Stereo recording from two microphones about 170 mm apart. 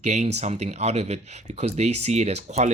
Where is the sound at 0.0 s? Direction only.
40° right (ahead or behind).